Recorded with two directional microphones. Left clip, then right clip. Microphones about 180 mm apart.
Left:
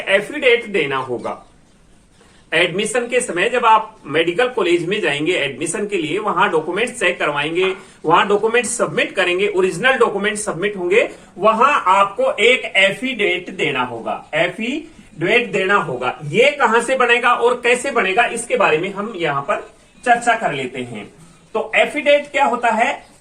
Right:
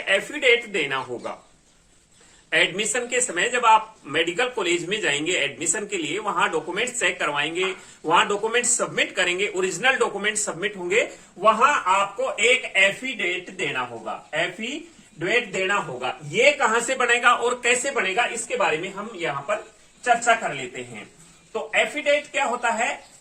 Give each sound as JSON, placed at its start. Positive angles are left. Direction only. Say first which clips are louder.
{"t": 0.0, "sound": "speech", "louder": "left 5 dB", "side_deg": -15}
{"t": 2.5, "sound": "speech", "louder": "left 4 dB", "side_deg": -15}
{"t": 21.5, "sound": "speech", "louder": "left 6 dB", "side_deg": -5}